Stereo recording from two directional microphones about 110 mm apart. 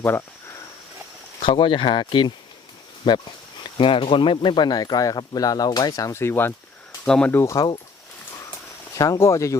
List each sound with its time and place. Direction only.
1.4 s speech: 50° left (ahead or behind); by 6.5 s 20° left (ahead or behind)
7.0 s speech: 10° left (ahead or behind)
7.3 s speech: 20° left (ahead or behind)
7.5 s speech: 40° left (ahead or behind)
9.0 s speech: 30° left (ahead or behind)